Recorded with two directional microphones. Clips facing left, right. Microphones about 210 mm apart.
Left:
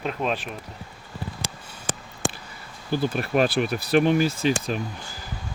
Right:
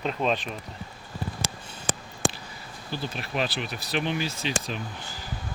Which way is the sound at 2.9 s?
50° left (ahead or behind).